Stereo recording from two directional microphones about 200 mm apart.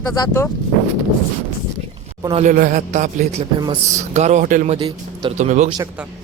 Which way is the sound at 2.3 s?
40° right (ahead or behind).